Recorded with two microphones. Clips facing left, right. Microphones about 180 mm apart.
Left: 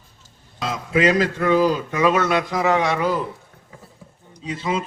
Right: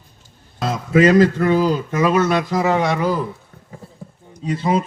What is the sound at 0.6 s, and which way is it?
Speech, 45° right (ahead or behind).